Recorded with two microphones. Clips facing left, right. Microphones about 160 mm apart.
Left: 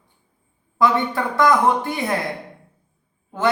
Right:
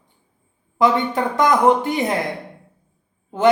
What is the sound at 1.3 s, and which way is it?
Speech, 20° right (ahead or behind).